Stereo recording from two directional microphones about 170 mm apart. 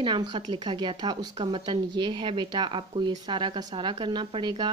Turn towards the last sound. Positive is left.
turn(degrees=-25)  # may be behind; listen again after turning